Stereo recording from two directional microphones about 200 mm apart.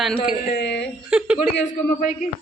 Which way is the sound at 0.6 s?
60° left (ahead or behind).